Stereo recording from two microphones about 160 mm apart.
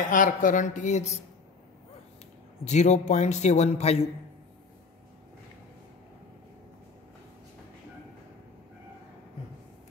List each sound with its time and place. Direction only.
0.1 s a man's voice: 55° left (ahead or behind)
2.6 s a man's voice: 45° left (ahead or behind)